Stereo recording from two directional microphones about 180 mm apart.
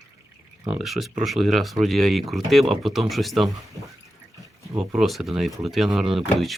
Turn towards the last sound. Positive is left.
turn(degrees=0)  # may be behind; listen again after turning